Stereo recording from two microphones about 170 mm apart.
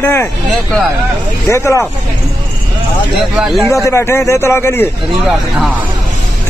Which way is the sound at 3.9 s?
15° left (ahead or behind).